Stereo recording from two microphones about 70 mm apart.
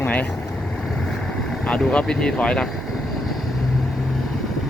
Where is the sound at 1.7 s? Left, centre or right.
Centre.